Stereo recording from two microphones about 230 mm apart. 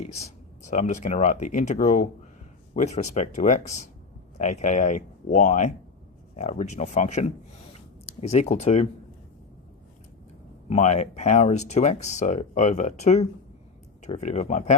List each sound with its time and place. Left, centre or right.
0.0 s speech: left
10.7 s speech: left